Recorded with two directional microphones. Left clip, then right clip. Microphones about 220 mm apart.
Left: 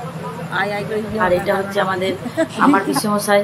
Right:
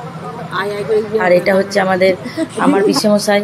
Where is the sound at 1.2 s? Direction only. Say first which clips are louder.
Right 4 dB; 25° right (ahead or behind).